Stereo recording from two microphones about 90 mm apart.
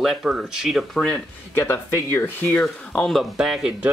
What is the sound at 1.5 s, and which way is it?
Speech, 30° left (ahead or behind).